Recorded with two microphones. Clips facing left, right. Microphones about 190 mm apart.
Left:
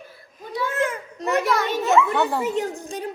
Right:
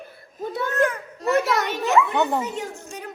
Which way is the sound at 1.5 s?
20° right (ahead or behind).